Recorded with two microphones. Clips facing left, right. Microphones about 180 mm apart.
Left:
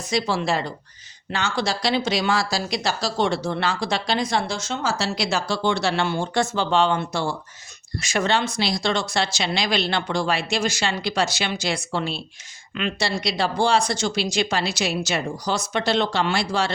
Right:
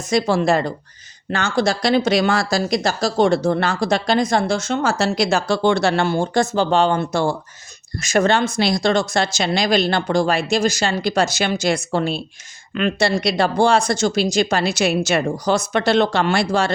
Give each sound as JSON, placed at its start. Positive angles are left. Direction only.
{"t": 0.1, "sound": "speech", "side_deg": -50}